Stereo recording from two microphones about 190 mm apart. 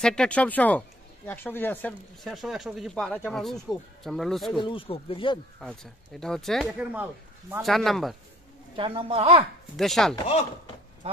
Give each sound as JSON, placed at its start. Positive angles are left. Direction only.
{"t": 0.0, "sound": "speech", "side_deg": 5}
{"t": 4.6, "sound": "speech", "side_deg": 25}
{"t": 5.6, "sound": "speech", "side_deg": 5}
{"t": 8.7, "sound": "a woman's voice", "side_deg": -30}
{"t": 9.8, "sound": "speech", "side_deg": 0}